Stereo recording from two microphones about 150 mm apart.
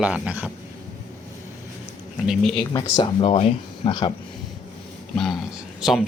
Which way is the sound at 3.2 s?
40° left (ahead or behind).